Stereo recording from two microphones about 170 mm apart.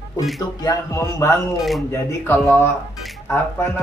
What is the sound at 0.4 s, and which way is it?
Music, 20° left (ahead or behind).